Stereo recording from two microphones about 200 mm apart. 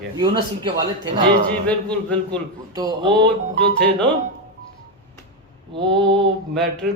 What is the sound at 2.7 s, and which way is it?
Speech, 20° right (ahead or behind).